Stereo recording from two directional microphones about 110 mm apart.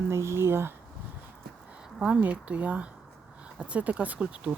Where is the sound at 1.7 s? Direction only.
5° right (ahead or behind).